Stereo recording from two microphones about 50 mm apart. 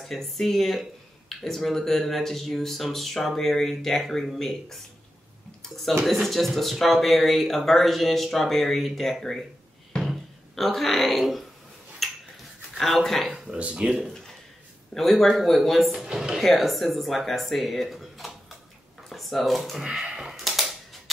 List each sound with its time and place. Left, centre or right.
0.0 s speech: centre
6.2 s speech: centre
10.0 s music: centre
12.0 s a sound: centre
12.7 s speech: centre
13.6 s speech: right
15.0 s speech: centre
16.0 s a woman's voice: centre
16.3 s speech: centre
19.8 s speech: centre
20.3 s typewriter: centre